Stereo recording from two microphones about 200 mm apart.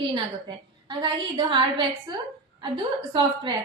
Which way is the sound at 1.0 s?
25° right (ahead or behind).